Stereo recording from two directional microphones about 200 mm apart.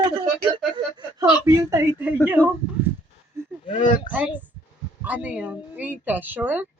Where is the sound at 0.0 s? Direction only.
20° right (ahead or behind).